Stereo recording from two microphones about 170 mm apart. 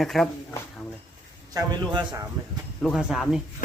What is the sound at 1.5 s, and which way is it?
Speech, 25° right (ahead or behind).